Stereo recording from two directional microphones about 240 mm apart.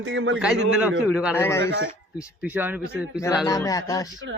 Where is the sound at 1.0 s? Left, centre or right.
Centre.